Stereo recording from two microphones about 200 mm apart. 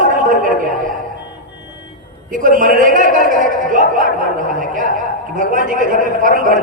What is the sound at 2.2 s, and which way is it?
A man's voice, 40° right (ahead or behind).